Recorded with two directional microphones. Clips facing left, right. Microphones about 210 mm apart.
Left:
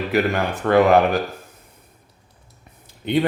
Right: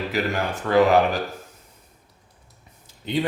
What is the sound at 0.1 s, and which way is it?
Speech, 60° left (ahead or behind).